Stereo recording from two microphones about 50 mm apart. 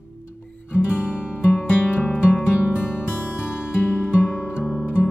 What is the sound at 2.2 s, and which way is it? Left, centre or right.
Music, left.